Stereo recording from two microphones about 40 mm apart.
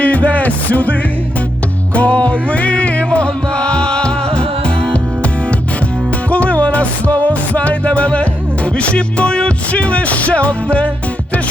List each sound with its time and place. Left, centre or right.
0.0 s music: left
6.3 s music: left